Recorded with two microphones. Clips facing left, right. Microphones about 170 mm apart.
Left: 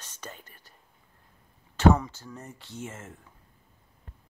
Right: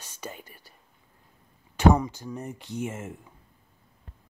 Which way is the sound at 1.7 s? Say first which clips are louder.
Right 1 dB; 15° right (ahead or behind).